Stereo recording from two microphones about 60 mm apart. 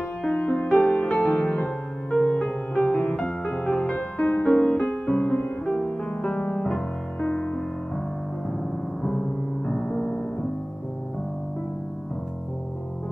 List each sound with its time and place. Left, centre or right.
0.3 s music: left
9.0 s music: centre